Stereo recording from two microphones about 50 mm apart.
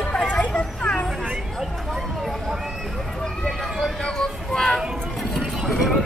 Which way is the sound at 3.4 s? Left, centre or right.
Centre.